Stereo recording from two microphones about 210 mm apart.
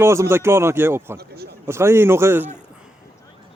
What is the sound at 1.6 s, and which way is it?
Speech, 10° right (ahead or behind).